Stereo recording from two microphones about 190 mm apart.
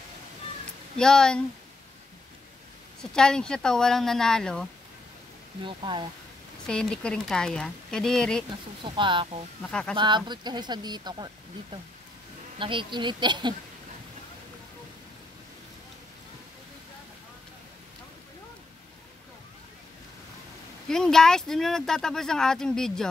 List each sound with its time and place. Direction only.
0.9 s speech: 5° left (ahead or behind)
3.0 s speech: 5° left (ahead or behind)
5.6 s speech: 25° right (ahead or behind)
6.7 s speech: 5° left (ahead or behind)
8.8 s speech: 25° right (ahead or behind)
9.7 s speech: 5° left (ahead or behind)
9.9 s speech: 25° right (ahead or behind)
12.5 s speech: 25° right (ahead or behind)
20.9 s speech: 5° left (ahead or behind)